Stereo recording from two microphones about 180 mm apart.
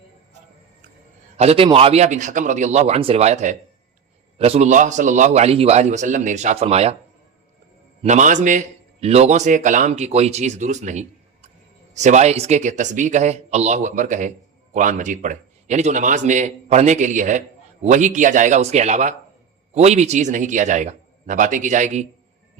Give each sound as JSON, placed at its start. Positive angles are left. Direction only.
{"t": 1.4, "sound": "a man's voice", "side_deg": -30}
{"t": 8.0, "sound": "a man's voice", "side_deg": -40}